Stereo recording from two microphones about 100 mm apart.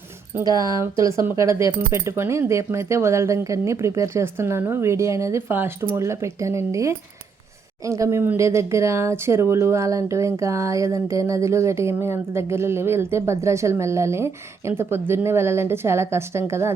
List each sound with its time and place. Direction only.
0.8 s speech: 30° right (ahead or behind)